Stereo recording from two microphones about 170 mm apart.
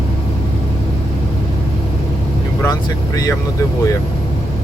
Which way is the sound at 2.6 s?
20° left (ahead or behind).